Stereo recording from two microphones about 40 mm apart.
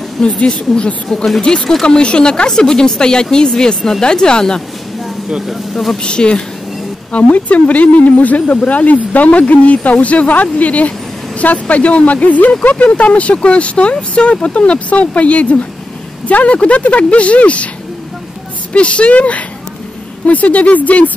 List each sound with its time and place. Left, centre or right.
0.2 s speech: centre
1.7 s a woman's voice: centre
5.5 s speech: centre
6.0 s a woman's voice: left
7.1 s a woman's voice: left
18.7 s speech: left